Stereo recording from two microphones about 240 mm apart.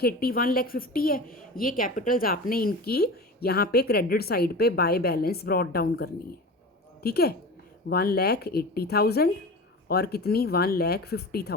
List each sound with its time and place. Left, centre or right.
0.0 s a woman's voice: left